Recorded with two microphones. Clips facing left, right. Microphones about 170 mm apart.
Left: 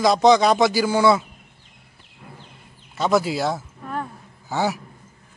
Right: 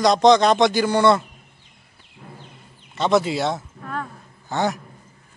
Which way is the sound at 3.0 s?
5° left (ahead or behind).